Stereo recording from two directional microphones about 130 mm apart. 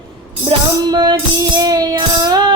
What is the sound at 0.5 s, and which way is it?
Music, 45° right (ahead or behind).